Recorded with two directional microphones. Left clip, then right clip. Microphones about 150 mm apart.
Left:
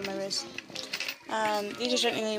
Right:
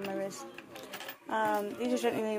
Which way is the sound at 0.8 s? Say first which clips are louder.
Left 9 dB; 5° right (ahead or behind).